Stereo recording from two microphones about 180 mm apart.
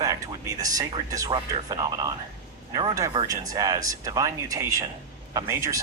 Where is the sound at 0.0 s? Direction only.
20° right (ahead or behind).